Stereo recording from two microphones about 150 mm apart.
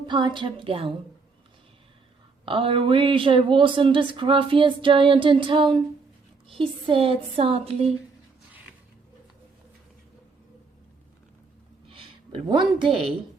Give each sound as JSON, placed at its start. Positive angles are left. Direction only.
{"t": 0.1, "sound": "speech", "side_deg": -30}
{"t": 2.4, "sound": "speech", "side_deg": -35}
{"t": 11.9, "sound": "a sound", "side_deg": -35}